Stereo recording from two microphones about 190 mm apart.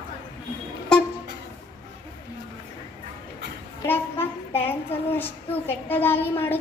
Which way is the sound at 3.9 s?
10° left (ahead or behind).